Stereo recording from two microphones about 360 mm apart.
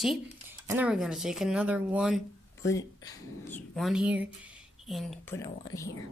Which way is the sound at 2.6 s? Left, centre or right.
Centre.